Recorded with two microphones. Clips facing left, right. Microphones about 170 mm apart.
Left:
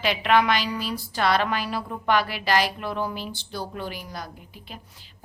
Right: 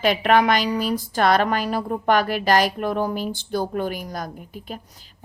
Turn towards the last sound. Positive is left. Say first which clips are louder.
# right 8 dB
turn(degrees=-45)  # may be behind; listen again after turning